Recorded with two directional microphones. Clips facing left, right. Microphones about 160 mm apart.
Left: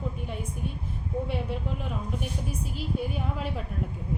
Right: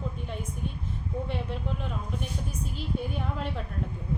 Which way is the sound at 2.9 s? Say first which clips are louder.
Left 1 dB; 5° left (ahead or behind).